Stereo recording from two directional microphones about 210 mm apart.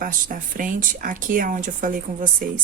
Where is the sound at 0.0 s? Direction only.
40° right (ahead or behind).